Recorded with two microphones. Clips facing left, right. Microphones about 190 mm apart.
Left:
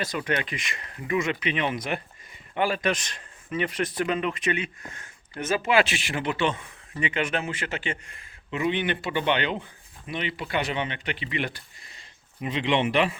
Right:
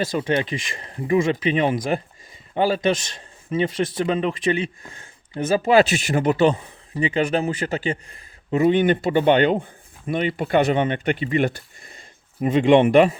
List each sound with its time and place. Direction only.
0.0 s a man's voice: 30° right (ahead or behind); by 13.1 s 45° right (ahead or behind)